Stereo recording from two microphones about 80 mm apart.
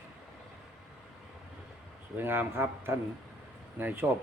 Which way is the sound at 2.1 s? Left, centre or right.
Right.